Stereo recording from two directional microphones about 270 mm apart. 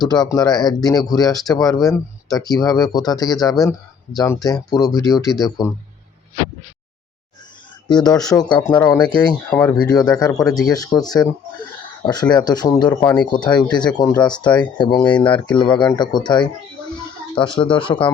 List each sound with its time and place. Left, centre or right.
0.1 s speech: centre
7.9 s speech: centre